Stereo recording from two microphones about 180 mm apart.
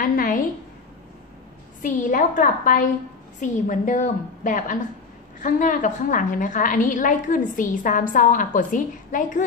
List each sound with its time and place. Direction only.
0.0 s a woman's voice: 50° left (ahead or behind)
1.8 s a woman's voice: 45° left (ahead or behind)